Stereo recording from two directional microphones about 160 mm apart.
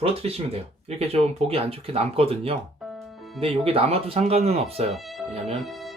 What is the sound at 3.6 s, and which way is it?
Speech, 35° right (ahead or behind).